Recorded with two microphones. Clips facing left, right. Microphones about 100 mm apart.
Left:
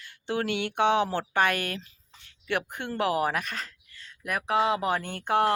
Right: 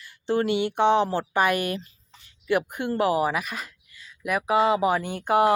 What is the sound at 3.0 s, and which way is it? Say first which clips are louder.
Speech: right 3 dB; centre (ahead or behind).